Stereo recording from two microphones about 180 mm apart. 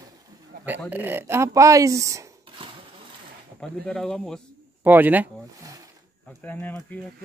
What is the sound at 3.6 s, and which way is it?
Speech, 5° left (ahead or behind).